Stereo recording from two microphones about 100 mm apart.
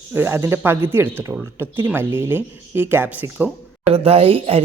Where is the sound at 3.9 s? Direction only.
80° right.